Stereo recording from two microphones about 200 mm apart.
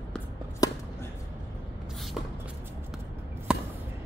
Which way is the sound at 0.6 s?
20° left (ahead or behind).